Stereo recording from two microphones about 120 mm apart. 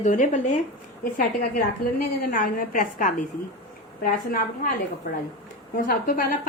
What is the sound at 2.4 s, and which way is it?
Speech, 90° left.